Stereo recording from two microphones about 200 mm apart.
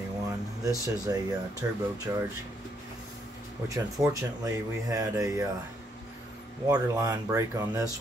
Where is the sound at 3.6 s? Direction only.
15° right (ahead or behind).